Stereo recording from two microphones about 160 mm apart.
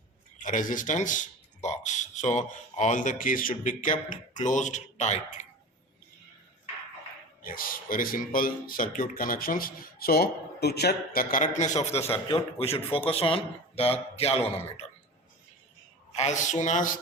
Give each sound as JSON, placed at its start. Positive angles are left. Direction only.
{"t": 0.3, "sound": "a man's voice", "side_deg": 55}
{"t": 7.4, "sound": "speech", "side_deg": 60}
{"t": 16.1, "sound": "a man's voice", "side_deg": 45}